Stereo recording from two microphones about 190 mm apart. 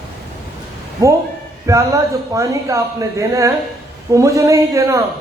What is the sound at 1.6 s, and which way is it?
A man's voice, 15° right (ahead or behind).